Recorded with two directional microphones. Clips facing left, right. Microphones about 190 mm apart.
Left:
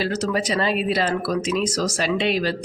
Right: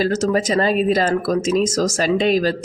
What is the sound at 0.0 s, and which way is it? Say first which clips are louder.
Speech: right 5 dB; 45° right (ahead or behind).